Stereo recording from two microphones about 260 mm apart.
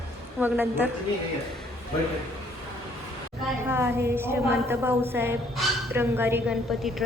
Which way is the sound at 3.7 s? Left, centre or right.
Centre.